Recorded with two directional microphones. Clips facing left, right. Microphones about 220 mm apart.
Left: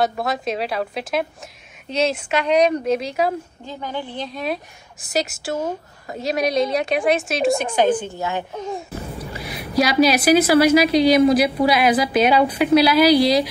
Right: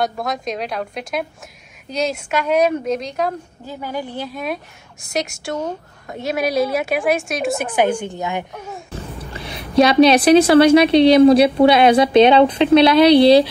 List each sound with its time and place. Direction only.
0.0 s a woman's voice: 5° left (ahead or behind)
3.6 s speech: 10° right (ahead or behind)
5.1 s a woman's voice: 5° left (ahead or behind); by 8.5 s 15° right (ahead or behind)
9.3 s a woman's voice: 30° right (ahead or behind)